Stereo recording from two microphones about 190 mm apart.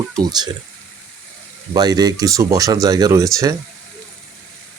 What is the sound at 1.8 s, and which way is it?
Speech, 20° right (ahead or behind).